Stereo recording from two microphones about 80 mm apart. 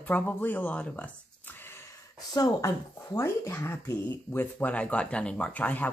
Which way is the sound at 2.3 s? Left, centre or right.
Left.